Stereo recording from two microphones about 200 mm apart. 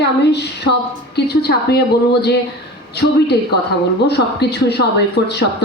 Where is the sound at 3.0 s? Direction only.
55° left (ahead or behind).